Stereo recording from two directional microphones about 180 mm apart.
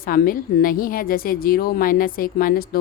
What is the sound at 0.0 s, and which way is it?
Speech, 55° left (ahead or behind).